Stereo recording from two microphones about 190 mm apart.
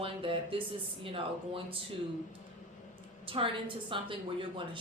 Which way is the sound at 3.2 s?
30° right (ahead or behind).